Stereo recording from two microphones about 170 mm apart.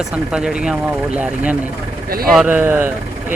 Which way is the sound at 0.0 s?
5° right (ahead or behind).